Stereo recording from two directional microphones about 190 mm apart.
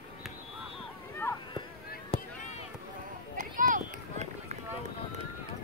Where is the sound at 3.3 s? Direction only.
45° right (ahead or behind).